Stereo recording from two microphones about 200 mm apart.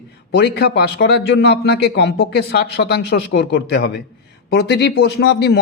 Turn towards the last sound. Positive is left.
turn(degrees=55)  # may be behind; listen again after turning